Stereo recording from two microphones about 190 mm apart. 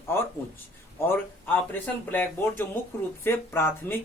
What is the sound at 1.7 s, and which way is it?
Speech, 10° left (ahead or behind).